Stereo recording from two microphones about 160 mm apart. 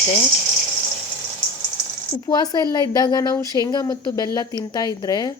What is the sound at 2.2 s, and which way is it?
Speech, 25° left (ahead or behind).